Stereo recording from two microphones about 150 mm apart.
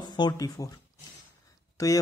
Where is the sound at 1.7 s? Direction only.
20° left (ahead or behind).